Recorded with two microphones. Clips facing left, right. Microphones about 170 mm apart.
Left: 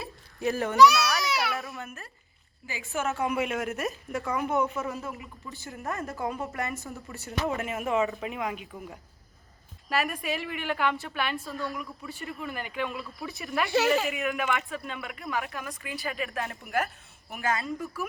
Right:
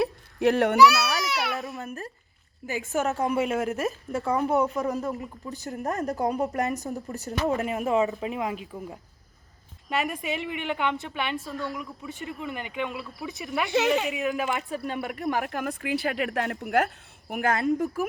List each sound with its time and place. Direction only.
0.0 s baby cry: 70° right (ahead or behind)
0.9 s baby cry: centre (ahead or behind)
1.8 s a woman's voice: 35° right (ahead or behind)
9.9 s speech: 20° right (ahead or behind)
14.2 s a woman's voice: 35° right (ahead or behind)
15.4 s a woman's voice: 65° right (ahead or behind)